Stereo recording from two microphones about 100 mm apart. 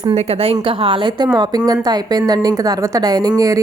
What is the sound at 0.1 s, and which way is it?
A woman's voice, 65° right (ahead or behind).